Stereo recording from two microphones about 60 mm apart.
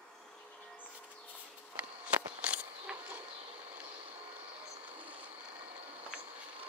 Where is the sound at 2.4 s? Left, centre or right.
Right.